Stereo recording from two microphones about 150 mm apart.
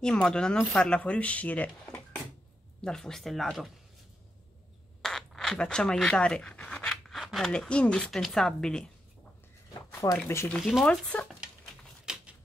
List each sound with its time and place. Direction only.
0.0 s speech: 5° left (ahead or behind)
5.0 s speech: 5° left (ahead or behind)
9.8 s speech: 15° left (ahead or behind)
10.5 s speech: centre (ahead or behind)
12.1 s a sound: 5° right (ahead or behind)